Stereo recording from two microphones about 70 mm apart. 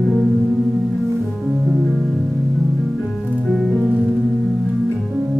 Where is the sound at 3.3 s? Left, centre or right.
Centre.